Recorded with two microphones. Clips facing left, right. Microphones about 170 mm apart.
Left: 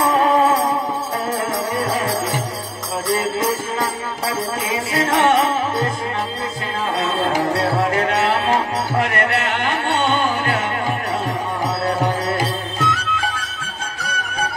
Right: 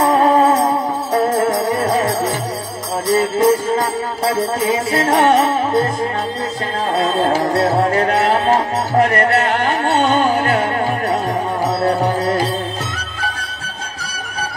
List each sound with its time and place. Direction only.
0.0 s music: 40° right (ahead or behind)
3.2 s music: 40° right (ahead or behind)
7.0 s music: 40° right (ahead or behind)
11.9 s music: 35° right (ahead or behind)